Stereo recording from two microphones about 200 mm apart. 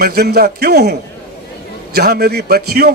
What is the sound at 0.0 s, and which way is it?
A man's voice, 50° right (ahead or behind).